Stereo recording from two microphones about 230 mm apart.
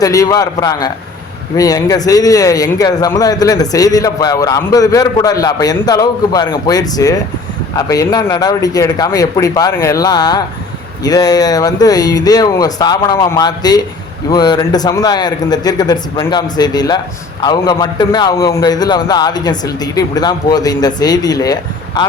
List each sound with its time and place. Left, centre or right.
0.0 s speech: centre